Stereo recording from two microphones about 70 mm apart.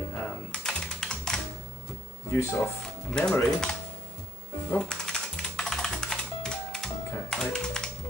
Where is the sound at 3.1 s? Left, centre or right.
Centre.